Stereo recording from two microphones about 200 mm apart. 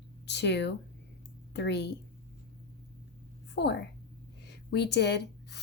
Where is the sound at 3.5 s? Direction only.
60° left (ahead or behind).